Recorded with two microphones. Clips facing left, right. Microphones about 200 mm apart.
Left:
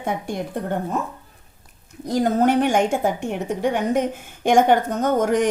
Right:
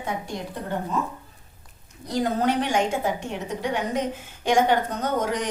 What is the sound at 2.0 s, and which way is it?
Speech, 50° left (ahead or behind).